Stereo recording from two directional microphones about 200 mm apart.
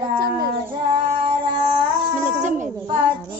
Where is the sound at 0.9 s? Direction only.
25° right (ahead or behind).